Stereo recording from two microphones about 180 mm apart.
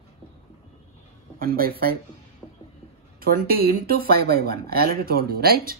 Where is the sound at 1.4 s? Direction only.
55° right (ahead or behind).